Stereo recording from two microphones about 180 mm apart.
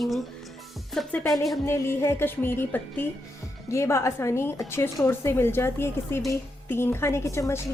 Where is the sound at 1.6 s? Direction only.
15° left (ahead or behind).